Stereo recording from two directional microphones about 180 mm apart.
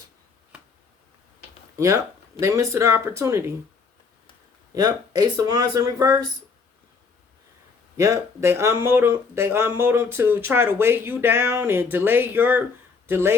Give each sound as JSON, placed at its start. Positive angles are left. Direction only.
{"t": 2.4, "sound": "speech", "side_deg": -15}
{"t": 4.7, "sound": "speech", "side_deg": -20}
{"t": 7.9, "sound": "speech", "side_deg": -15}